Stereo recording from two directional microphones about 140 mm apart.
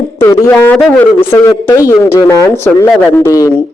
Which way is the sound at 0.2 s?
20° left (ahead or behind).